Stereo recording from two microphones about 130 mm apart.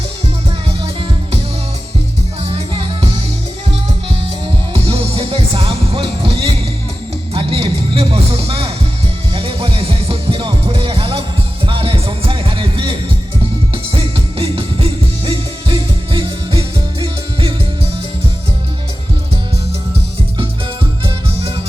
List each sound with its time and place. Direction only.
2.4 s music: 45° right (ahead or behind)
4.7 s music: 45° right (ahead or behind)